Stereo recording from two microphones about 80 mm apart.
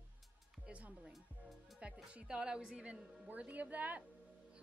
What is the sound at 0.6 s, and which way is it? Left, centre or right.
A woman's voice, centre.